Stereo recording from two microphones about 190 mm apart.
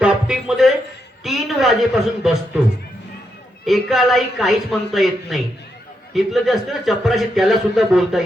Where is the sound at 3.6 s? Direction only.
Centre (ahead or behind).